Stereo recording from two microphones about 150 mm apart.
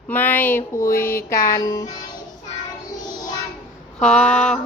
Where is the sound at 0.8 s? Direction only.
70° left (ahead or behind).